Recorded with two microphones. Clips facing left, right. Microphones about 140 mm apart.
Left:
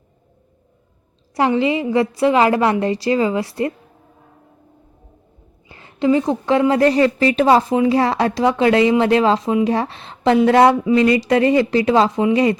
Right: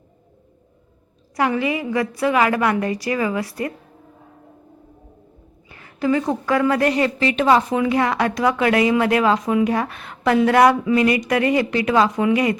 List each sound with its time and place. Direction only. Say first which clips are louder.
1.4 s speech: left 4 dB; 25° left (ahead or behind)
5.6 s a woman's voice: left 4 dB; 25° left (ahead or behind)